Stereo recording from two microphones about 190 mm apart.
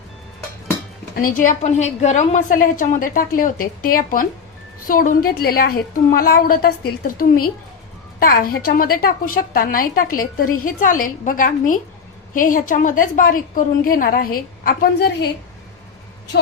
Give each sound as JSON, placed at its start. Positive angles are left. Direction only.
{"t": 1.1, "sound": "a woman's voice", "side_deg": 45}